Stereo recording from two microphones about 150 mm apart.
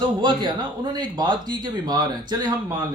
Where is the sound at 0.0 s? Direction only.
30° right (ahead or behind).